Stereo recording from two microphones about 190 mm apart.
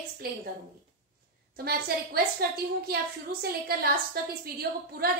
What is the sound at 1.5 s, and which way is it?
A woman's voice, 55° right (ahead or behind).